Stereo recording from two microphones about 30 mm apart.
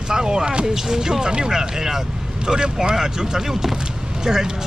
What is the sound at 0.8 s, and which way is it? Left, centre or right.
Speech, centre.